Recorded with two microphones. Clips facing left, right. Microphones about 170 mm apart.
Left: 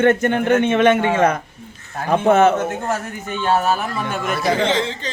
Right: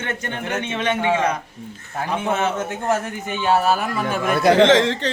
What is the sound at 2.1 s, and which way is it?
Speech, 50° left (ahead or behind).